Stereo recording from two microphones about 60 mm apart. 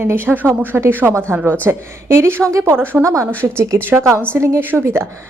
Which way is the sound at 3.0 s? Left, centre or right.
Right.